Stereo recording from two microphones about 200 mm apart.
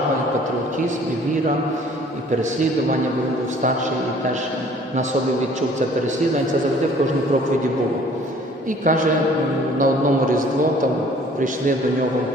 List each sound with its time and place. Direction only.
8.8 s a man's voice: 40° right (ahead or behind)